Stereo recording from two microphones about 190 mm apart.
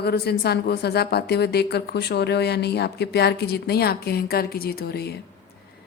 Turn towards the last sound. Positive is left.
turn(degrees=55)  # may be behind; listen again after turning